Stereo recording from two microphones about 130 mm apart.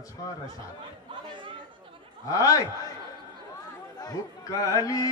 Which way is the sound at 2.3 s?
25° left (ahead or behind).